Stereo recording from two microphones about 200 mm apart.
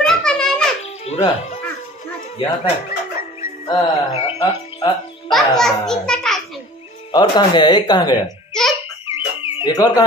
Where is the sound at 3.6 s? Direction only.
20° left (ahead or behind).